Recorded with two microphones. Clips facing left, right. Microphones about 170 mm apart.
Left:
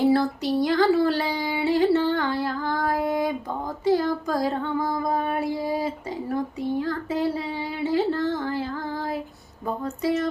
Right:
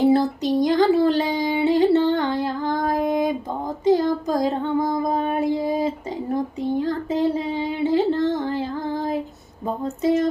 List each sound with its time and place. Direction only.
0.0 s a sound: 20° right (ahead or behind)
3.8 s child singing: 20° right (ahead or behind)
9.6 s speech: 25° right (ahead or behind)